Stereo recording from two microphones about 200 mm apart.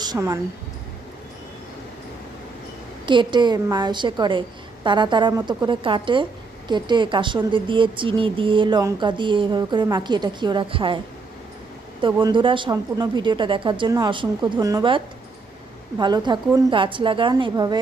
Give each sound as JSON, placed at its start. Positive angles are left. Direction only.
{"t": 0.0, "sound": "speech", "side_deg": -20}
{"t": 3.1, "sound": "speech", "side_deg": -25}
{"t": 12.0, "sound": "speech", "side_deg": -25}